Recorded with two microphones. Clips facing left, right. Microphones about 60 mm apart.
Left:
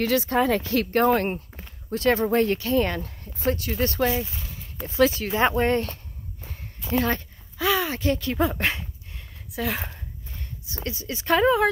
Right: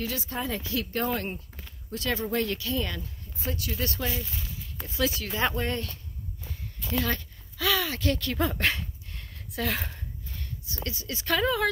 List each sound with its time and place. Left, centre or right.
0.0 s speech: left